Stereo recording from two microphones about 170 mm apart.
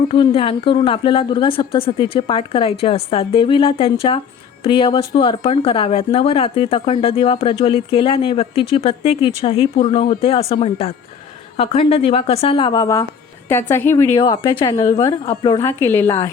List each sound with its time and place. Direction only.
0.1 s a woman's voice: 30° left (ahead or behind); by 16.1 s 10° left (ahead or behind)